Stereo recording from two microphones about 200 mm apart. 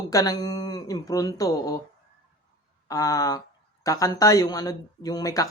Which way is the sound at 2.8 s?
15° left (ahead or behind).